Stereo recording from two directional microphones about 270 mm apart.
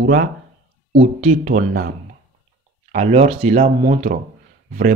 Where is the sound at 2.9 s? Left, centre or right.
Right.